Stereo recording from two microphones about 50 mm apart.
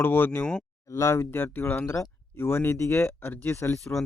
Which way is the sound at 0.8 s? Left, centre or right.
Left.